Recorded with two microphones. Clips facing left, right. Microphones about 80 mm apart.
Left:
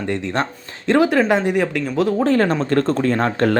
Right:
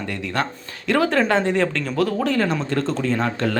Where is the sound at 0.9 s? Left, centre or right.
Centre.